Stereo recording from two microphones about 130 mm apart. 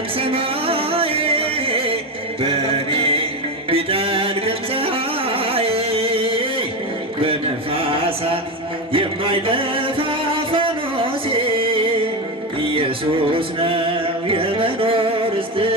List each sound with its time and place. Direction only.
0.2 s music: 45° right (ahead or behind)
7.3 s a sound: 45° right (ahead or behind)
8.9 s music: 40° right (ahead or behind)
13.3 s music: 45° right (ahead or behind)